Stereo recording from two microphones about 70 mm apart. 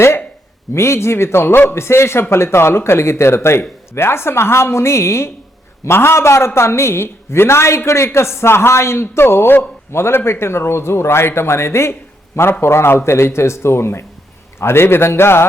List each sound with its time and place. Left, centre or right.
0.7 s a man's voice: left